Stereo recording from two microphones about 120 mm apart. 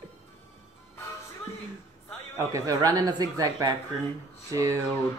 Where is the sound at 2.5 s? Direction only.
25° right (ahead or behind).